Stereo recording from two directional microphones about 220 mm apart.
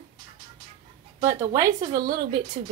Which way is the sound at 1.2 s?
15° right (ahead or behind).